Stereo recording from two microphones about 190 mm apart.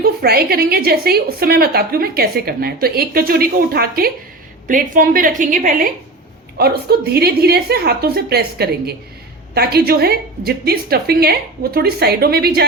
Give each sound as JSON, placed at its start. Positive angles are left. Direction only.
{"t": 0.0, "sound": "a woman's voice", "side_deg": -55}
{"t": 6.6, "sound": "a woman's voice", "side_deg": -55}